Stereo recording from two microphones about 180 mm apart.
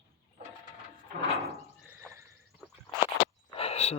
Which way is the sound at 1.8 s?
15° right (ahead or behind).